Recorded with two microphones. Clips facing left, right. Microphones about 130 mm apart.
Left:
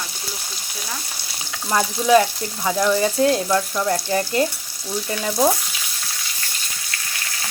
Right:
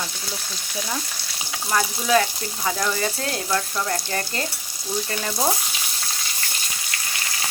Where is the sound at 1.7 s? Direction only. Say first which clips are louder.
Left 5 dB; 20° left (ahead or behind).